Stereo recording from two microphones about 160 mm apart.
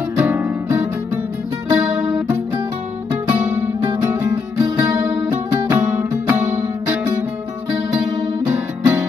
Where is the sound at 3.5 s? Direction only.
15° right (ahead or behind).